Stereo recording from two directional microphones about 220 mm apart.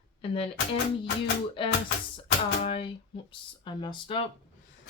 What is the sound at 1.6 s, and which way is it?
Speech, 25° left (ahead or behind).